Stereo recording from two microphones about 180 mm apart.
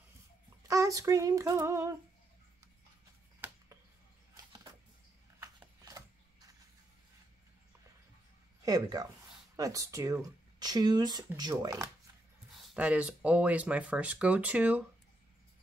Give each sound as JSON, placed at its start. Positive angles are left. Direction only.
{"t": 0.7, "sound": "speech", "side_deg": -20}
{"t": 3.3, "sound": "a sound", "side_deg": -10}
{"t": 8.6, "sound": "speech", "side_deg": -20}
{"t": 12.5, "sound": "speech", "side_deg": -5}